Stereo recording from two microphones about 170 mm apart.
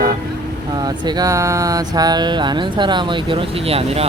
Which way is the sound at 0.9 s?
25° right (ahead or behind).